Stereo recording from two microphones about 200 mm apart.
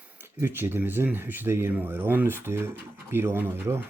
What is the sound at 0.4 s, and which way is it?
Speech, 10° right (ahead or behind).